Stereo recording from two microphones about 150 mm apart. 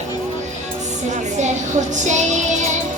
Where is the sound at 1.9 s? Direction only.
55° right (ahead or behind).